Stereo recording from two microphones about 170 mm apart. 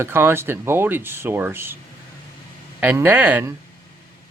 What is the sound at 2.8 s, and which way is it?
Speech, 10° right (ahead or behind).